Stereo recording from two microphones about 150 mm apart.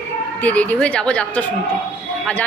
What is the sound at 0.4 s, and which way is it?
A woman's voice, 10° left (ahead or behind).